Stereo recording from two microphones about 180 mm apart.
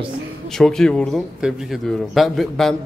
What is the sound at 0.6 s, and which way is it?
Speech, 5° left (ahead or behind).